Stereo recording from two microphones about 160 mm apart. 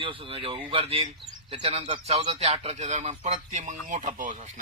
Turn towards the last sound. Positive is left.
turn(degrees=-50)  # may be behind; listen again after turning